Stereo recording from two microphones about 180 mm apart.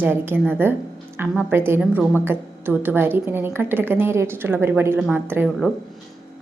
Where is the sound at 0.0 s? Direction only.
10° right (ahead or behind).